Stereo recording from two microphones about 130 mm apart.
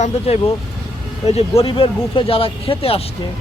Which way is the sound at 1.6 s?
40° left (ahead or behind).